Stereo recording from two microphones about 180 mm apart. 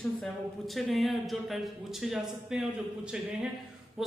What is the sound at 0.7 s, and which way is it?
A man's voice, centre (ahead or behind).